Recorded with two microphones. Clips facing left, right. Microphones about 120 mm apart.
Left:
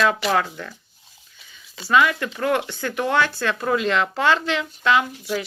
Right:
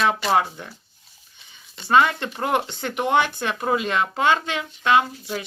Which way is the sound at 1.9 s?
30° right (ahead or behind).